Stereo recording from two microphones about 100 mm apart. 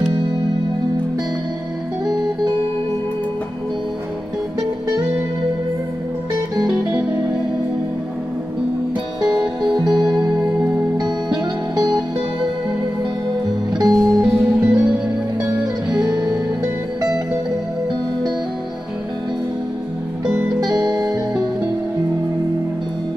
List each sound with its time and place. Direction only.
6.7 s music: 10° right (ahead or behind)
9.8 s music: 5° right (ahead or behind)
13.7 s music: centre (ahead or behind)
16.1 s music: 40° right (ahead or behind)
20.2 s music: 10° right (ahead or behind)
20.7 s music: 40° right (ahead or behind)